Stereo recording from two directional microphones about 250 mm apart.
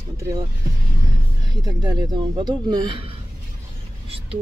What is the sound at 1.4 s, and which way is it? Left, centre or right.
A man's voice, centre.